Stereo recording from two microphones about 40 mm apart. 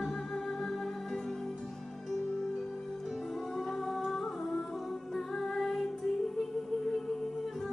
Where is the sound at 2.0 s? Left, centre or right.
Centre.